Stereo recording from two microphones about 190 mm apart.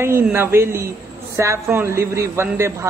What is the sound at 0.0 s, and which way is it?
A woman's voice, 10° right (ahead or behind).